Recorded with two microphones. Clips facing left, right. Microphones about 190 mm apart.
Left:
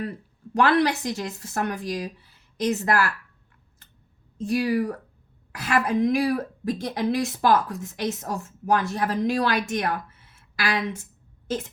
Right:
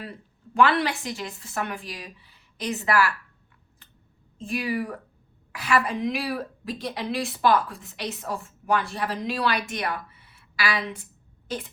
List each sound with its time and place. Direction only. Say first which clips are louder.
0.5 s a woman's voice: left 2 dB; 45° left (ahead or behind)
4.5 s a woman's voice: left 5 dB; 40° left (ahead or behind)